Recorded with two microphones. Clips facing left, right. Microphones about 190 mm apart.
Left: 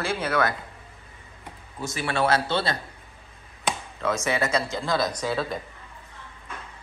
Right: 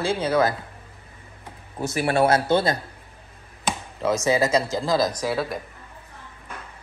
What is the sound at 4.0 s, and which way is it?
Speech, 35° right (ahead or behind).